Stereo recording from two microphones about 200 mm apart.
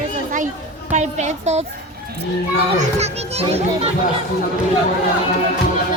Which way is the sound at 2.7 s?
30° right (ahead or behind).